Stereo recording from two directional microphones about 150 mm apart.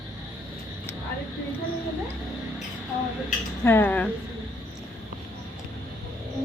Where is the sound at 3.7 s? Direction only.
15° left (ahead or behind).